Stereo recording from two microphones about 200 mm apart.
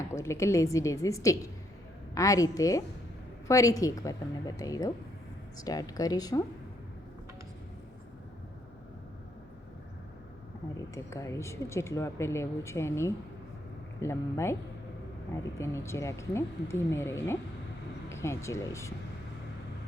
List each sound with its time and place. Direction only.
0.1 s a woman's voice: 15° left (ahead or behind)
10.9 s speech: 15° left (ahead or behind)
15.5 s speech: 15° left (ahead or behind)